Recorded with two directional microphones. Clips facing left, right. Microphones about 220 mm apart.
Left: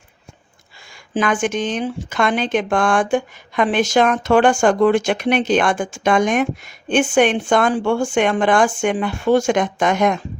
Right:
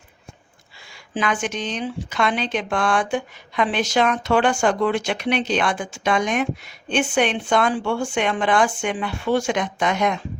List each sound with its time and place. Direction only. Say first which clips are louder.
1.1 s speech: left 5 dB; 50° left (ahead or behind)